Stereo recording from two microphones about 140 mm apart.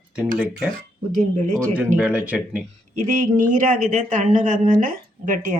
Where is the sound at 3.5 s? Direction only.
70° right (ahead or behind).